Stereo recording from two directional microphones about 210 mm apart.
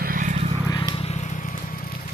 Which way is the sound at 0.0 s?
40° right (ahead or behind).